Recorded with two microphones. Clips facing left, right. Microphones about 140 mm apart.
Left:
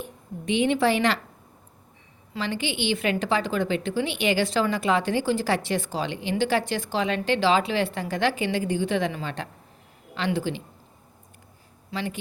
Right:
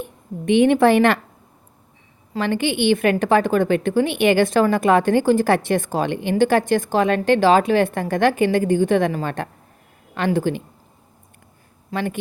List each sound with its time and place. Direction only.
0.0 s a woman's voice: 55° right (ahead or behind)
2.3 s a woman's voice: 55° right (ahead or behind)
11.9 s speech: 50° right (ahead or behind)